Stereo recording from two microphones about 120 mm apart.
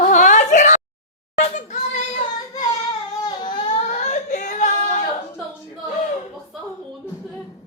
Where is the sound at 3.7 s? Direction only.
70° left (ahead or behind); by 5.0 s 90° left.